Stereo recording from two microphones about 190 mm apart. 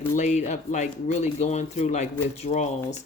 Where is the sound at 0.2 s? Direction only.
40° left (ahead or behind).